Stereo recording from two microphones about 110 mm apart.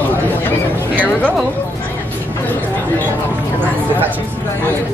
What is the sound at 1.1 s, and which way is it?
Speech, 15° left (ahead or behind).